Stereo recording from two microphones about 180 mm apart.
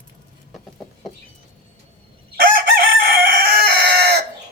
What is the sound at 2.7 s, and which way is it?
Chicken, 55° right (ahead or behind).